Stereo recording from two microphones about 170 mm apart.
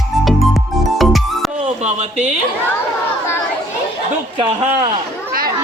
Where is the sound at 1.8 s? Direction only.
40° right (ahead or behind).